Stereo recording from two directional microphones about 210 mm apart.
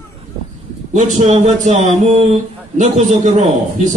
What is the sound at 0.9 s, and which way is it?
A man's voice, 35° right (ahead or behind).